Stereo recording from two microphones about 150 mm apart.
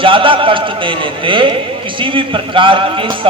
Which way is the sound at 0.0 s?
35° right (ahead or behind).